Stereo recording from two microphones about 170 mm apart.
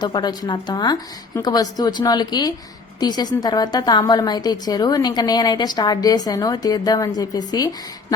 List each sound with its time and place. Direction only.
0.0 s a woman's voice: 25° left (ahead or behind)